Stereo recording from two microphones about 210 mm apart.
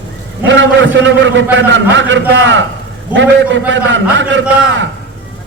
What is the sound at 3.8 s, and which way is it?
Speech, 60° right (ahead or behind).